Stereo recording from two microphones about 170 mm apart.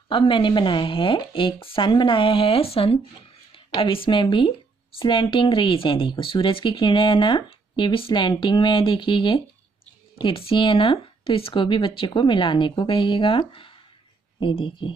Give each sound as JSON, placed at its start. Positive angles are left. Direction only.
{"t": 0.1, "sound": "speech", "side_deg": 30}